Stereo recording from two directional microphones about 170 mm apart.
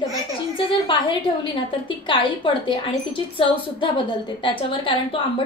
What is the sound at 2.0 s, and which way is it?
A woman's voice, 30° left (ahead or behind).